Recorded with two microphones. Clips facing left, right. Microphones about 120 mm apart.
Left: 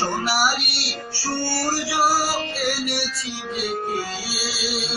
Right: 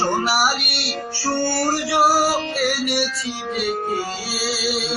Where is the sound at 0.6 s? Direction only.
55° right (ahead or behind).